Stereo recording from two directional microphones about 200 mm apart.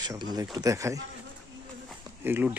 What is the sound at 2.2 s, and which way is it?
Speech, 10° right (ahead or behind).